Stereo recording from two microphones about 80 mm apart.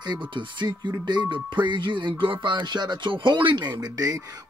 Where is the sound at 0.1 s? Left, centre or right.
Right.